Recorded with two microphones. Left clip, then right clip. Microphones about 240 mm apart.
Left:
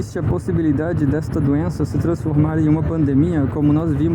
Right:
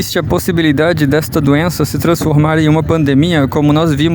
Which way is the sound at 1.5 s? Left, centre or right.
Right.